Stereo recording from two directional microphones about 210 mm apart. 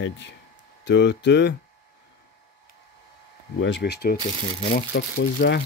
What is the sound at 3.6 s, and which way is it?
Speech, 55° left (ahead or behind).